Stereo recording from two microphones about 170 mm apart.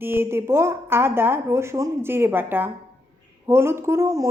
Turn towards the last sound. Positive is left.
turn(degrees=-15)  # may be behind; listen again after turning